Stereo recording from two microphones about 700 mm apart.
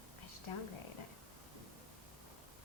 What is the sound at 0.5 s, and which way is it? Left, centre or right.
Speech, left.